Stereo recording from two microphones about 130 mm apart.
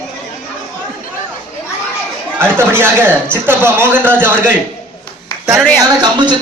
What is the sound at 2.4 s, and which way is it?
A man's voice, 20° right (ahead or behind).